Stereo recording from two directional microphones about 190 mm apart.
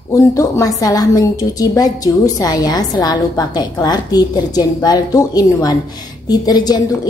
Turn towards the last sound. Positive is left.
turn(degrees=20)  # may be behind; listen again after turning